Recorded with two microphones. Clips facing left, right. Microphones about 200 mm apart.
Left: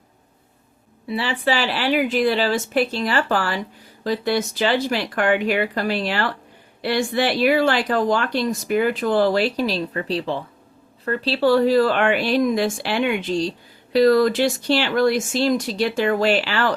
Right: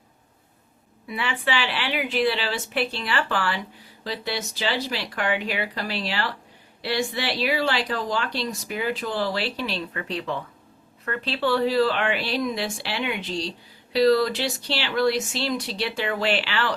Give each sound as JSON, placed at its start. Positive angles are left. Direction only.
{"t": 1.0, "sound": "speech", "side_deg": 35}